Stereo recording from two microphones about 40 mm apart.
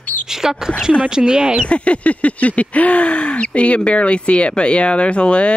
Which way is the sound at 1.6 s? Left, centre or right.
Left.